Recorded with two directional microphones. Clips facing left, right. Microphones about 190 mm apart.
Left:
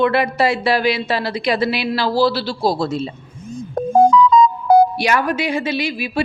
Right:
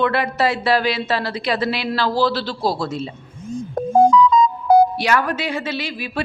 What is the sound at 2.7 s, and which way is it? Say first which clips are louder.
Speech: left 4 dB; 30° left (ahead or behind).